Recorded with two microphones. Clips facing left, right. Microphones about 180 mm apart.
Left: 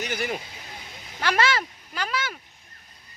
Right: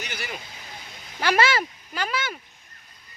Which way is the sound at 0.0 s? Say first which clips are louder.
Left 7 dB; 45° left (ahead or behind).